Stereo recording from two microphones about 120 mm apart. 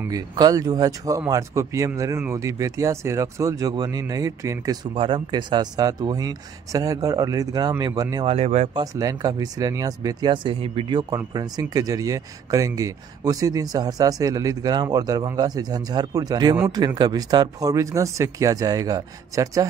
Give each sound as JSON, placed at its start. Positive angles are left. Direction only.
{"t": 0.1, "sound": "speech", "side_deg": -30}
{"t": 4.9, "sound": "speech", "side_deg": -45}
{"t": 8.3, "sound": "speech", "side_deg": -60}
{"t": 8.9, "sound": "speech", "side_deg": -30}